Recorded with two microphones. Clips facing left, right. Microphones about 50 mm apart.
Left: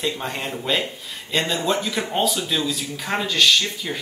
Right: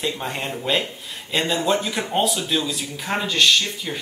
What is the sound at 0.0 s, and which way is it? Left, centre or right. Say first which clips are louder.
Speech: even; centre.